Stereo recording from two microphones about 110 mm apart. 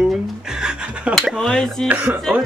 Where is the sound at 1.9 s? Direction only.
20° right (ahead or behind).